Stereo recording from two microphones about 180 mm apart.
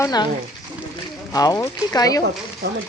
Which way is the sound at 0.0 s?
20° left (ahead or behind).